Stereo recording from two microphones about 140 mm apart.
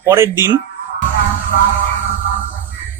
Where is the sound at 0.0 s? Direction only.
20° right (ahead or behind).